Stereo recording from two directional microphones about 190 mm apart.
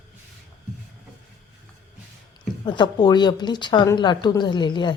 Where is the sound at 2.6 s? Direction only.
25° left (ahead or behind).